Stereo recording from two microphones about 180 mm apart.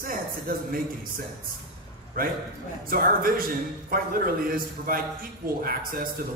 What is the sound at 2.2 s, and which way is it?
A man's voice, 50° right (ahead or behind).